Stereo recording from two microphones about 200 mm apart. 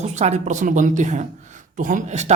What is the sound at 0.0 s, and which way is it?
Speech, 35° right (ahead or behind).